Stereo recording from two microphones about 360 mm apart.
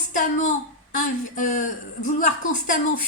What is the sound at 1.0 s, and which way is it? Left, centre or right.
Speech, left.